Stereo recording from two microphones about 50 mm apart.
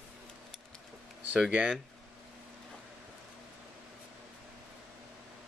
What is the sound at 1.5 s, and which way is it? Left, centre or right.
Speech, right.